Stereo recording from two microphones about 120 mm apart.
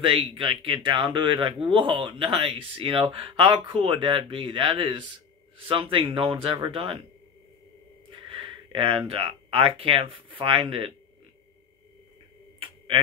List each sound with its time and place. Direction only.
0.0 s speech: 45° right (ahead or behind)
8.7 s speech: 50° right (ahead or behind)
12.5 s a sound: 50° right (ahead or behind)